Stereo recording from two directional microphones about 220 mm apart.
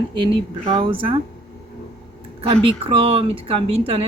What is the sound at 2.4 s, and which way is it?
Speech, 25° right (ahead or behind).